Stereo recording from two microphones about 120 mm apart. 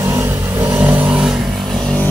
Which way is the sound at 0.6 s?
15° right (ahead or behind).